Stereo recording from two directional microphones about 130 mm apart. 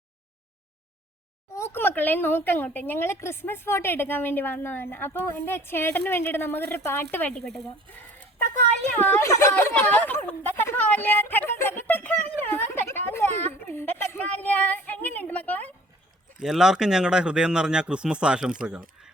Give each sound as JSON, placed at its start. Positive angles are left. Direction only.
{"t": 1.5, "sound": "speech", "side_deg": 20}
{"t": 9.0, "sound": "speech", "side_deg": 15}
{"t": 16.4, "sound": "speech", "side_deg": -5}